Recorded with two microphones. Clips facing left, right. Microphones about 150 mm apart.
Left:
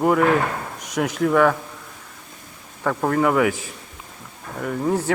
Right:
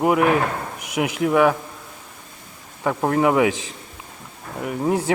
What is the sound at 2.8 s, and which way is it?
Speech, 15° right (ahead or behind).